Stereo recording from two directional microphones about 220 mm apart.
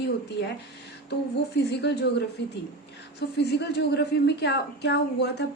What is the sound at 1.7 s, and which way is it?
A woman's voice, 50° left (ahead or behind).